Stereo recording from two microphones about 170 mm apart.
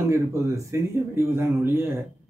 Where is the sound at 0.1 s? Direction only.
15° right (ahead or behind).